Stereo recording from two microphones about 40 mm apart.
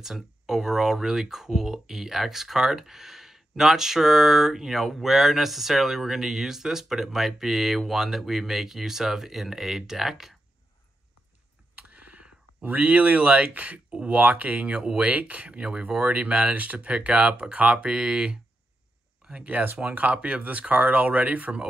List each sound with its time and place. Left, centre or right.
0.0 s speech: centre
11.7 s a sound: right
13.0 s speech: right
19.5 s speech: right
19.8 s speech: right